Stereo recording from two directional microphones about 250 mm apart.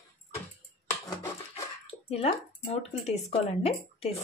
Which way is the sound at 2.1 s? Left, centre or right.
Left.